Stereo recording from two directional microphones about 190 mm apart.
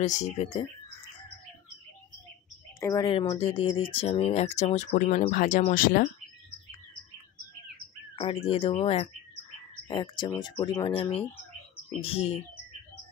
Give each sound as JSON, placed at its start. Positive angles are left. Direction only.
{"t": 0.0, "sound": "speech", "side_deg": 40}
{"t": 2.8, "sound": "speech", "side_deg": 20}
{"t": 8.2, "sound": "speech", "side_deg": 30}